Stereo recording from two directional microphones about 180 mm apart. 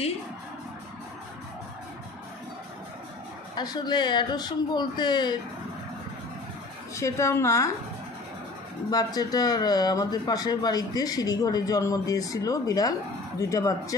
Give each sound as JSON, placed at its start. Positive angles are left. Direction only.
{"t": 3.5, "sound": "a man's voice", "side_deg": 25}
{"t": 7.0, "sound": "a woman's voice", "side_deg": 15}
{"t": 8.9, "sound": "a man's voice", "side_deg": 20}